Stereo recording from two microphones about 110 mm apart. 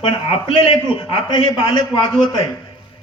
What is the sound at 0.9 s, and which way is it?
A man's voice, 50° left (ahead or behind).